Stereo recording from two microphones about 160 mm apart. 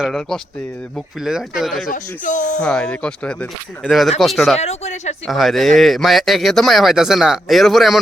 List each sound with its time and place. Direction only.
0.0 s speech: centre (ahead or behind)
1.9 s speech: 55° left (ahead or behind)
2.6 s speech: 5° left (ahead or behind)
4.5 s speech: 40° left (ahead or behind)
5.2 s speech: centre (ahead or behind)